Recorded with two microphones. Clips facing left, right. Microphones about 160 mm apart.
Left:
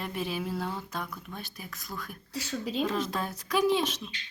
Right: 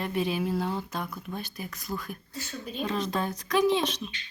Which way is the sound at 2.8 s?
5° left (ahead or behind).